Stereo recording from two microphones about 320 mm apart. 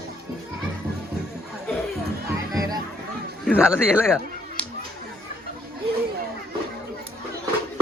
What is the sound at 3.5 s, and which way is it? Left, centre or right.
Speech, centre.